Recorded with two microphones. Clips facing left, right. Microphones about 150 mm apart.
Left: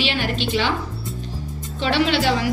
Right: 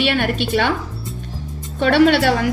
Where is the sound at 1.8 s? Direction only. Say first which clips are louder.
Right 6 dB; 55° right (ahead or behind).